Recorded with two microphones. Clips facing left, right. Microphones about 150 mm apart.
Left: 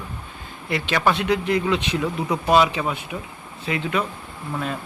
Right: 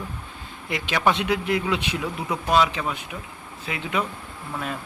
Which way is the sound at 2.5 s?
10° left (ahead or behind).